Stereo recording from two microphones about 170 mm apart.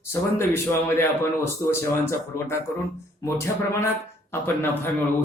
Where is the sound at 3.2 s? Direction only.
15° left (ahead or behind).